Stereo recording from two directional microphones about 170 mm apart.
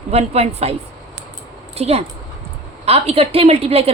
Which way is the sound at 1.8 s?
35° right (ahead or behind).